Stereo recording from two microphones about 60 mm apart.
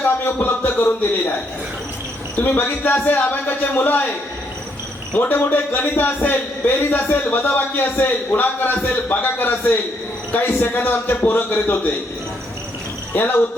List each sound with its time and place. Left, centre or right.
0.3 s a sound: left
2.4 s a man's voice: left
5.1 s a man's voice: left
13.1 s a man's voice: left